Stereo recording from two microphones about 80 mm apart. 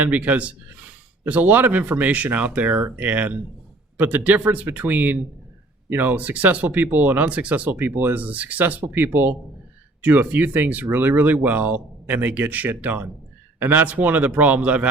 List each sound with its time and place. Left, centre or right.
0.0 s speech: centre